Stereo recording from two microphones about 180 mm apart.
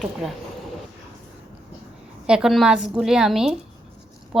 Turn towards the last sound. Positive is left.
turn(degrees=0)  # may be behind; listen again after turning